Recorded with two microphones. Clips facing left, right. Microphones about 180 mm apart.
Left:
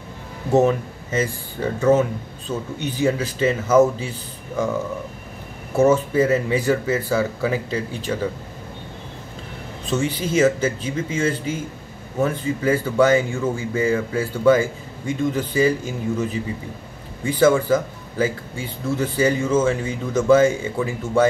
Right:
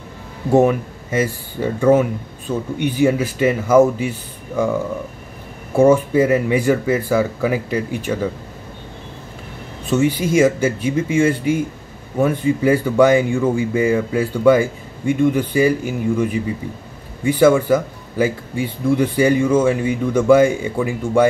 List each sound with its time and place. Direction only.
0.5 s speech: 10° right (ahead or behind)
5.8 s speech: 15° right (ahead or behind)
9.8 s speech: 10° right (ahead or behind)